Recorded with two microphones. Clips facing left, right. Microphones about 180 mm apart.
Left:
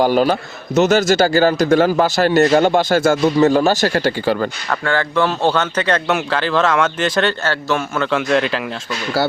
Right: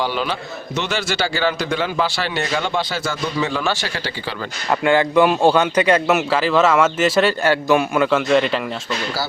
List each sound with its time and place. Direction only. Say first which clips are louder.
0.0 s a man's voice: left 8 dB; 45° left (ahead or behind)
4.7 s a man's voice: right 6 dB; 15° right (ahead or behind)
8.1 s a man's voice: left 2 dB; centre (ahead or behind)